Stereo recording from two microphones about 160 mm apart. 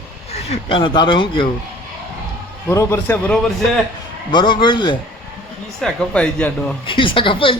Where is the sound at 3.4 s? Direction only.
Centre (ahead or behind).